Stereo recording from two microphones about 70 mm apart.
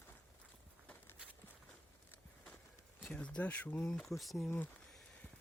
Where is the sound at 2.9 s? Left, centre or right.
Centre.